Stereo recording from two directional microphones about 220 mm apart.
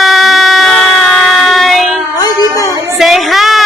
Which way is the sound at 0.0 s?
Centre (ahead or behind).